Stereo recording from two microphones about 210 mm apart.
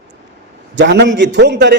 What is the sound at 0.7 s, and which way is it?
A man's voice, 55° right (ahead or behind).